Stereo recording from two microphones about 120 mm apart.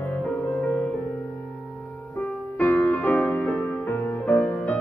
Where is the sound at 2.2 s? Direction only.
15° left (ahead or behind).